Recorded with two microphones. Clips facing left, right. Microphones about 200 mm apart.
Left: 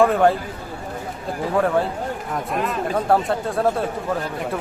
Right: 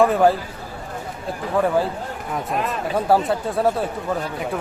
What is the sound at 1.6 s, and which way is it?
Speech, centre (ahead or behind).